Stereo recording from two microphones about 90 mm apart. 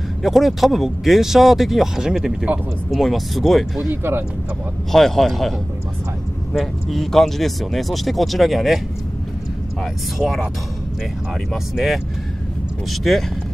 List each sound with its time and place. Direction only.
0.2 s speech: centre (ahead or behind)
3.9 s speech: 25° right (ahead or behind)
4.9 s speech: 5° left (ahead or behind)
6.5 s speech: centre (ahead or behind)
10.1 s speech: centre (ahead or behind)
11.5 s speech: centre (ahead or behind)